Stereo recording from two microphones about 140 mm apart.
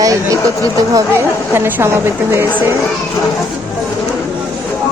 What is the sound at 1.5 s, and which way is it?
Speech, 15° right (ahead or behind).